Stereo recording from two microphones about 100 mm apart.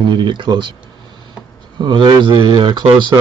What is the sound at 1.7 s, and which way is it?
Speech, 50° right (ahead or behind).